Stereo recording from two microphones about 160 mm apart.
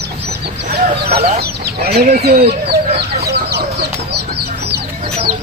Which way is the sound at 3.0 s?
90° right.